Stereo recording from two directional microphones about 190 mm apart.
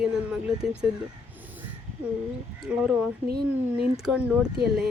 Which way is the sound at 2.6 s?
5° right (ahead or behind).